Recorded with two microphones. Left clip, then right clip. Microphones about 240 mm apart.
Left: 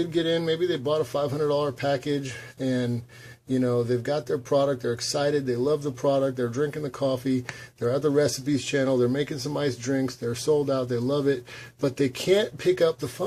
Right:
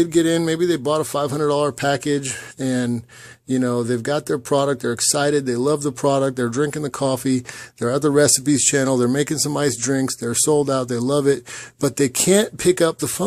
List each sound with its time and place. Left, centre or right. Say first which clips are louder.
0.0 s speech: right 7 dB; right